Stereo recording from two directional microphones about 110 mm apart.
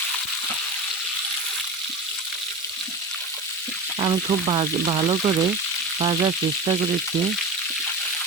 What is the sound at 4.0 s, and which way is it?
Frying, 50° right (ahead or behind).